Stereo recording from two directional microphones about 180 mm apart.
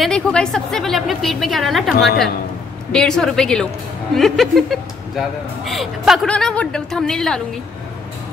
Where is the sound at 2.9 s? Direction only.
Centre (ahead or behind).